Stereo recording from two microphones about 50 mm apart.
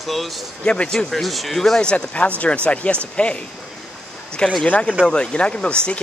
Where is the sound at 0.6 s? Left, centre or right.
Centre.